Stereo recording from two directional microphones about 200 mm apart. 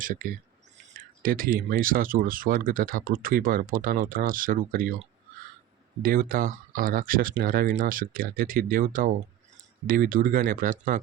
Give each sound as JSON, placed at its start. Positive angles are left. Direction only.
{"t": 0.0, "sound": "speech", "side_deg": -45}
{"t": 6.0, "sound": "speech", "side_deg": -45}